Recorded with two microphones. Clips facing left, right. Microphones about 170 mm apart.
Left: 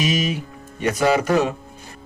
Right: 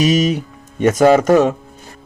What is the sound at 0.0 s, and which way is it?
A man's voice, 40° right (ahead or behind).